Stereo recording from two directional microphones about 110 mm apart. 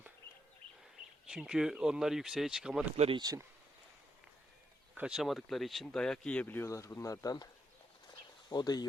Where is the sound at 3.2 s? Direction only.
35° right (ahead or behind).